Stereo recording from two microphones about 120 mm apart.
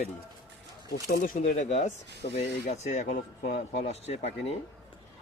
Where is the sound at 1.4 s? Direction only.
85° left; by 4.5 s 65° left (ahead or behind).